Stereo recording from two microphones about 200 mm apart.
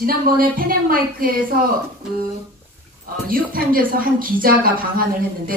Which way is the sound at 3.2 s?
45° right (ahead or behind).